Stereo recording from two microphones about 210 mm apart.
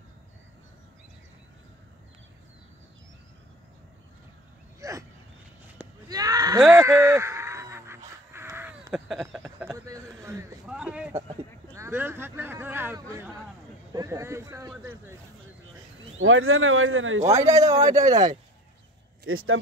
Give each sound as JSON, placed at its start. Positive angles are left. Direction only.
{"t": 4.7, "sound": "a sound", "side_deg": -15}
{"t": 9.6, "sound": "a sound", "side_deg": -15}
{"t": 10.7, "sound": "speech", "side_deg": -5}
{"t": 16.2, "sound": "speech", "side_deg": -75}
{"t": 17.2, "sound": "speech", "side_deg": -15}
{"t": 19.2, "sound": "speech", "side_deg": -75}